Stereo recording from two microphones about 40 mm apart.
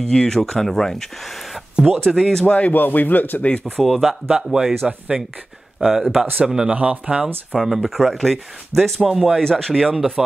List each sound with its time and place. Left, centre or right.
0.0 s speech: centre
2.0 s speech: centre
2.4 s a man's voice: left
3.6 s speech: centre
4.3 s speech: centre
5.8 s speech: centre
6.7 s speech: right
7.5 s speech: centre
9.4 s speech: centre
9.9 s speech: centre